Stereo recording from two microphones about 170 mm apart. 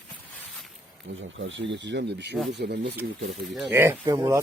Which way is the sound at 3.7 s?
15° right (ahead or behind).